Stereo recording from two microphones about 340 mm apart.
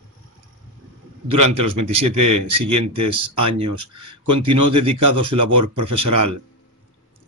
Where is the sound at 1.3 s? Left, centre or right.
Right.